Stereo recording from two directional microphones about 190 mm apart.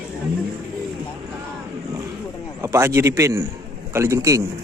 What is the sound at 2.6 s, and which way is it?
A man's voice, 15° right (ahead or behind).